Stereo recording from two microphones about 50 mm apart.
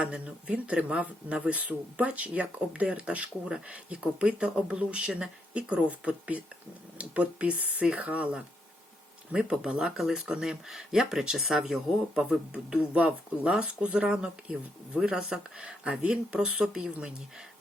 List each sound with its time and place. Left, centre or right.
0.0 s speech: right
9.3 s speech: centre